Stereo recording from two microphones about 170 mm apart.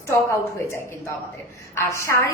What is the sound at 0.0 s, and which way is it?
A woman's voice, 15° left (ahead or behind).